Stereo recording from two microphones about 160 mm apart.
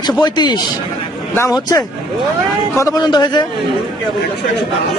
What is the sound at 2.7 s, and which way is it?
Speech, 20° left (ahead or behind).